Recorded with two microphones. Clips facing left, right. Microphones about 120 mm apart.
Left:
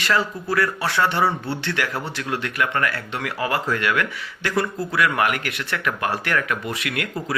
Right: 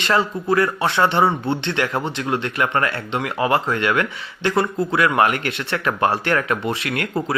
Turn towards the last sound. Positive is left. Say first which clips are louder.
# right 4 dB
turn(degrees=-30)  # may be behind; listen again after turning